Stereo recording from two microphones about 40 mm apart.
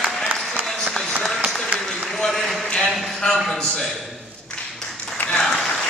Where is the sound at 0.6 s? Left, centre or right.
Centre.